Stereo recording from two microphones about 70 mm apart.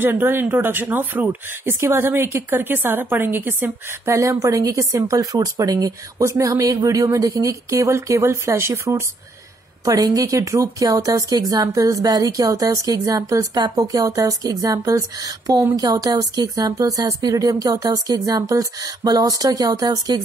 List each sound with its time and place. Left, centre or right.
0.0 s speech: right
1.8 s a woman's voice: right
4.1 s speech: right
9.8 s speech: right
13.6 s speech: right